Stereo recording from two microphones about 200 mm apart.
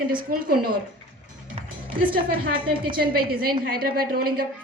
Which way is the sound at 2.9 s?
45° right (ahead or behind).